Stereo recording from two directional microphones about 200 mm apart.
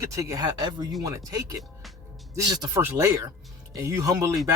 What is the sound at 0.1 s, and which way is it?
Speech, 15° right (ahead or behind).